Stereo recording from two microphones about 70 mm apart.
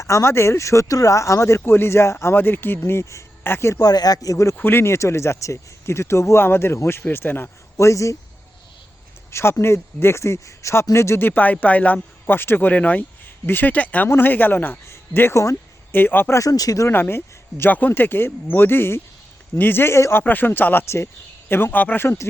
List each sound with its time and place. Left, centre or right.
0.0 s speech: left
3.8 s speech: left
4.6 s speech: left
7.8 s speech: left
9.3 s speech: left
16.3 s speech: left
16.9 s speech: left
20.2 s speech: left
20.8 s speech: left
21.5 s speech: left
22.0 s speech: left